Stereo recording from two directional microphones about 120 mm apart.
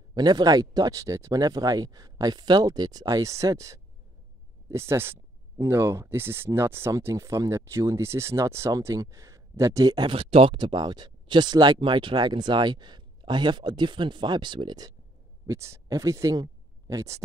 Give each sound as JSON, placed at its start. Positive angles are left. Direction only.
{"t": 0.1, "sound": "speech", "side_deg": -35}
{"t": 15.4, "sound": "speech", "side_deg": -25}